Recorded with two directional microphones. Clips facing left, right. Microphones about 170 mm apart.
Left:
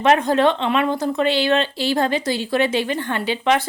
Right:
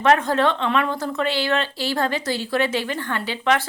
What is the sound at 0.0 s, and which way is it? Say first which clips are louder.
A woman's voice: left 2 dB; 15° left (ahead or behind).